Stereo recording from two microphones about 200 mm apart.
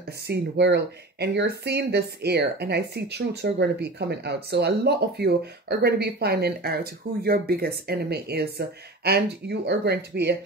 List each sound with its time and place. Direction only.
0.3 s speech: 55° right (ahead or behind)